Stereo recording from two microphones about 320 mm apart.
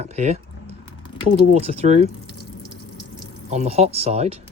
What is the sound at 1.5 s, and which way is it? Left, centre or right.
Speech, centre.